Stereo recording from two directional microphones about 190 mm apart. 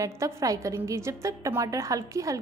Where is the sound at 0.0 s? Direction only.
15° right (ahead or behind).